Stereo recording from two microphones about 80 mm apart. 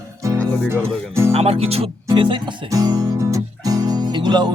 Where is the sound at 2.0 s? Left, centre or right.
Right.